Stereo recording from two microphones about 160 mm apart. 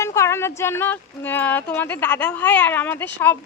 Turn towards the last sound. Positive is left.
turn(degrees=15)  # may be behind; listen again after turning